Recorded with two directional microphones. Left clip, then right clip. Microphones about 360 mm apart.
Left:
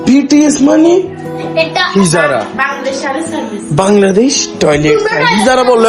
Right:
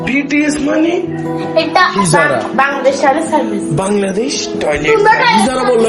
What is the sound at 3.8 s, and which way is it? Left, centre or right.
Speech, left.